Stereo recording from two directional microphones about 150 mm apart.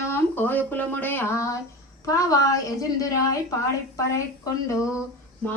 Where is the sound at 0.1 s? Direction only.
15° left (ahead or behind).